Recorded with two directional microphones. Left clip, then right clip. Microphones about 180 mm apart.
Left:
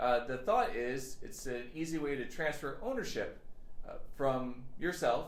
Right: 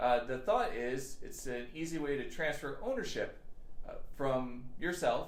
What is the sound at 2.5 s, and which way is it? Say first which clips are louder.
Speech: even; 65° left (ahead or behind).